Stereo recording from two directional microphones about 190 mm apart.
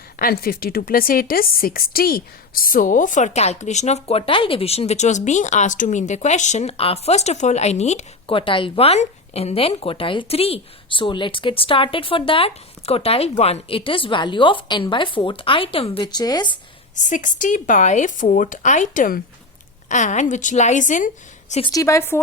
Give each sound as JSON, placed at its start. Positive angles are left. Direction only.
{"t": 0.2, "sound": "speech", "side_deg": 50}
{"t": 17.0, "sound": "speech", "side_deg": 40}
{"t": 21.7, "sound": "a woman's voice", "side_deg": 15}